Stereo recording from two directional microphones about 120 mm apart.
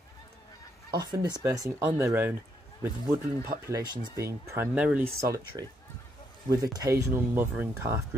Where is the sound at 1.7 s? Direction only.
20° right (ahead or behind).